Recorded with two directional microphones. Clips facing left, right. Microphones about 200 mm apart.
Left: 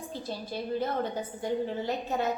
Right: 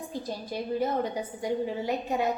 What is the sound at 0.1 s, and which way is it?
A woman's voice, 15° right (ahead or behind).